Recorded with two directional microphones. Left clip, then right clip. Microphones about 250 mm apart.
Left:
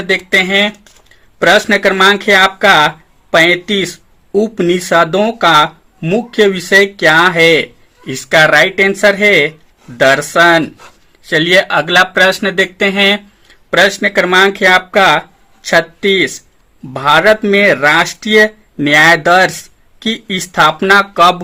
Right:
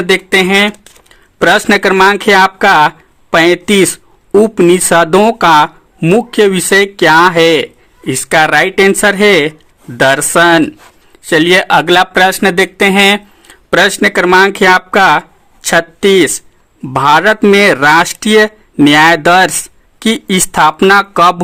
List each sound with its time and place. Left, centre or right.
0.1 s speech: right